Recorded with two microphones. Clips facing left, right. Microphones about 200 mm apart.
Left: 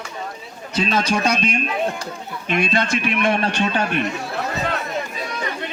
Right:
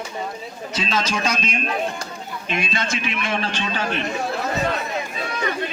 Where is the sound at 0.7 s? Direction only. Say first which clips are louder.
Left 4 dB; 60° left (ahead or behind).